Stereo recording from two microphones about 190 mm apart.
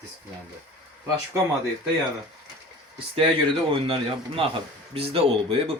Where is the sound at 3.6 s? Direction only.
30° right (ahead or behind).